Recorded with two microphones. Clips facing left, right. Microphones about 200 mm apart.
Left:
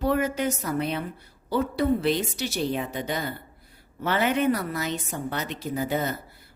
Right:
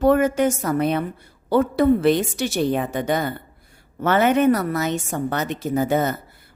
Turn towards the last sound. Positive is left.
turn(degrees=-45)  # may be behind; listen again after turning